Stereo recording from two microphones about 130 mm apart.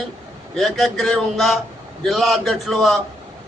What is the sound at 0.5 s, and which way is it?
A man's voice, centre (ahead or behind).